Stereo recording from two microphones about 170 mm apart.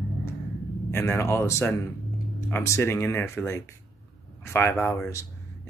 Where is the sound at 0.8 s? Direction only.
15° left (ahead or behind).